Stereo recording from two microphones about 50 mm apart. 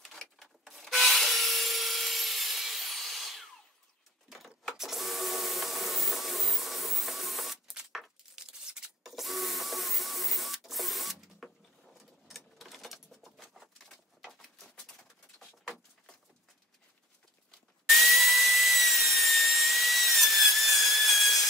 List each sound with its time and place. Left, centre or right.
0.0 s rub: centre
4.3 s a sound: centre
4.7 s vacuum cleaner: centre
8.4 s tearing: centre
9.0 s printer: centre
12.3 s typewriter: centre
15.3 s pigeon: centre
17.8 s sawing: centre